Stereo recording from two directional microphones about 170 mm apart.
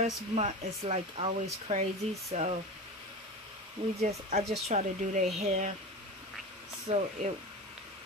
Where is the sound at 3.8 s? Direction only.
30° right (ahead or behind).